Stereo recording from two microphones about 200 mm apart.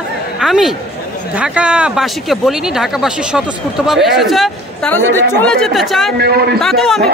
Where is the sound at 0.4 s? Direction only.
Centre (ahead or behind).